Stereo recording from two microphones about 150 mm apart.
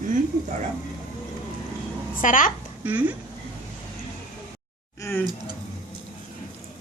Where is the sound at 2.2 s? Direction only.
60° left (ahead or behind).